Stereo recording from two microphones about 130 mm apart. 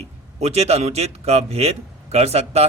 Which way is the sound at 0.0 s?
55° right (ahead or behind).